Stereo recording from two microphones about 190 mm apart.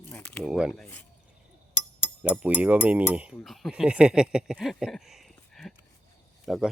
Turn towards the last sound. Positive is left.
turn(degrees=0)  # may be behind; listen again after turning